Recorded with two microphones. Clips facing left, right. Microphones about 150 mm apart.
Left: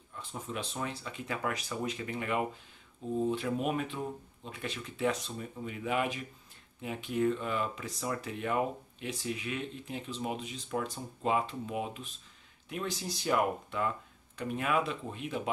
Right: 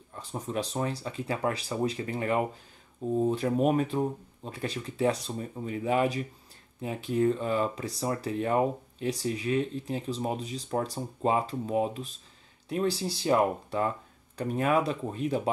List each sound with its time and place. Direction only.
0.1 s speech: 35° right (ahead or behind)